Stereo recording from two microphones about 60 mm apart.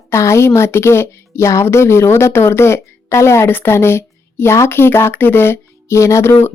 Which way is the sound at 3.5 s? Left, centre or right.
Left.